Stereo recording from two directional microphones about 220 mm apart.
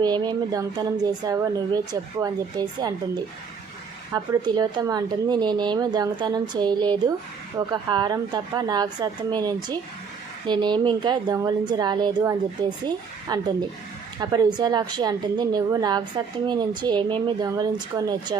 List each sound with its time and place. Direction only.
0.0 s a woman's voice: 20° right (ahead or behind)
4.1 s a woman's voice: 15° right (ahead or behind)